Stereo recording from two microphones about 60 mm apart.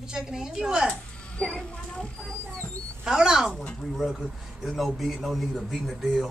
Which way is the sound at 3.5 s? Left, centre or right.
Centre.